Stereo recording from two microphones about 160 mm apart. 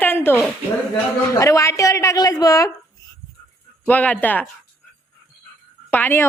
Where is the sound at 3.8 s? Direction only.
10° left (ahead or behind).